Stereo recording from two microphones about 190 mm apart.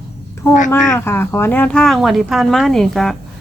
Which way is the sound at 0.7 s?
10° left (ahead or behind).